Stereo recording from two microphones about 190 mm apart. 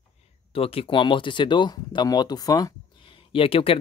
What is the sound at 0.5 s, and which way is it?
Speech, 30° left (ahead or behind).